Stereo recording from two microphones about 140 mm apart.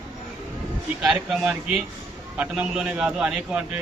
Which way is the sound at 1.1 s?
Centre (ahead or behind).